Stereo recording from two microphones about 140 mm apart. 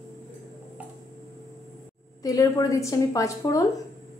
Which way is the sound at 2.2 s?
25° left (ahead or behind).